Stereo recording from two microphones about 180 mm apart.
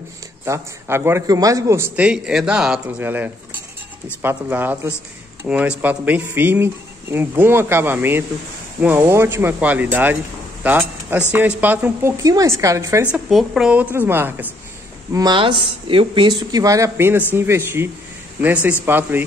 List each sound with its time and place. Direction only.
0.5 s speech: 15° right (ahead or behind)
13.1 s speech: centre (ahead or behind)
15.1 s speech: 25° right (ahead or behind)